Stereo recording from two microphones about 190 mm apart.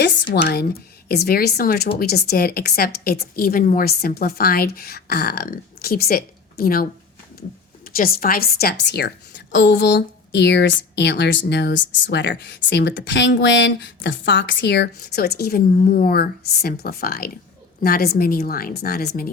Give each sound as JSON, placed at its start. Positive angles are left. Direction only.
{"t": 0.0, "sound": "a woman's voice", "side_deg": 70}
{"t": 7.9, "sound": "a woman's voice", "side_deg": 50}